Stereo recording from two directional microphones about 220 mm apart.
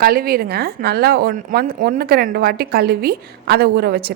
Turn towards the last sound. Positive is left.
turn(degrees=-45)  # may be behind; listen again after turning